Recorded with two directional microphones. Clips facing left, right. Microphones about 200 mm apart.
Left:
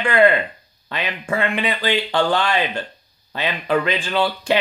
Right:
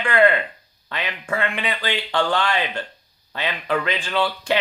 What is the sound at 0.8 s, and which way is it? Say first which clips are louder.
Speech: left 3 dB; 10° left (ahead or behind).